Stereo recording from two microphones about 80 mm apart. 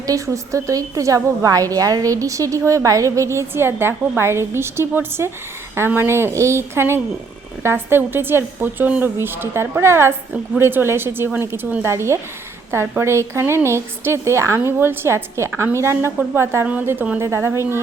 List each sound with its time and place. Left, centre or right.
0.0 s a woman's voice: right